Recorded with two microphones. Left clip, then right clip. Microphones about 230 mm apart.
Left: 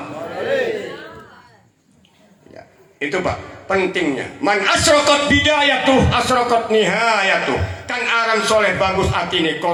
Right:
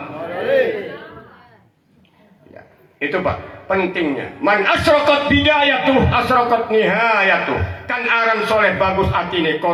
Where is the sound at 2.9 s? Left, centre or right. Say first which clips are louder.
Right 1 dB; left.